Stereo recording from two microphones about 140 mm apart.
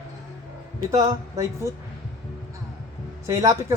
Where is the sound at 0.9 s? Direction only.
25° right (ahead or behind).